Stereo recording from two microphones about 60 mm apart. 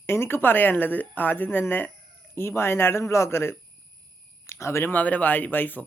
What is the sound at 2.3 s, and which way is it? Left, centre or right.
A man's voice, left.